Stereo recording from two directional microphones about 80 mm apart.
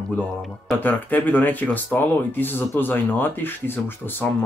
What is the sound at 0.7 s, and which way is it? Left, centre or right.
Speech, left.